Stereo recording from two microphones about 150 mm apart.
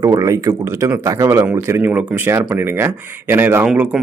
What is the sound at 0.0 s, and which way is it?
Speech, 25° right (ahead or behind).